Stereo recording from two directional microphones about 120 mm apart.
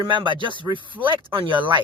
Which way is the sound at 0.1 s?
45° right (ahead or behind).